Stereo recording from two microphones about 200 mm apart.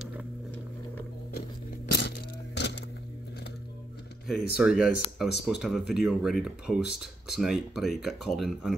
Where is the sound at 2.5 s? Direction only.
60° left (ahead or behind).